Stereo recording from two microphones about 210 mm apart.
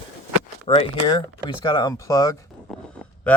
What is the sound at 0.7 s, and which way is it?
Speech, 25° left (ahead or behind).